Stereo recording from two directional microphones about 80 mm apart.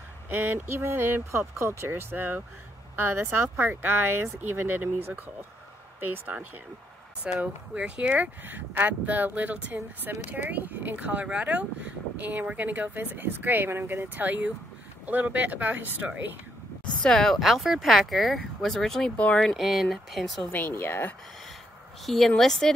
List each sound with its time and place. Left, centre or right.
0.3 s speech: right
17.0 s speech: centre
19.1 s speech: centre
19.4 s speech: centre
20.5 s speech: left
22.0 s speech: centre